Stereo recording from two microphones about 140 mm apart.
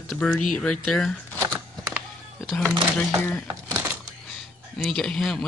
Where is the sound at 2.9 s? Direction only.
10° left (ahead or behind).